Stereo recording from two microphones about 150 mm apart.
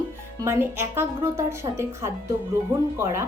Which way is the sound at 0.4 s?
15° right (ahead or behind).